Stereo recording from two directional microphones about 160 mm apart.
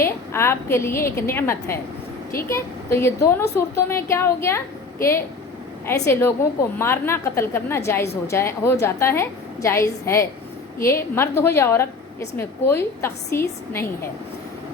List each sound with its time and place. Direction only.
0.0 s a woman's voice: 15° left (ahead or behind)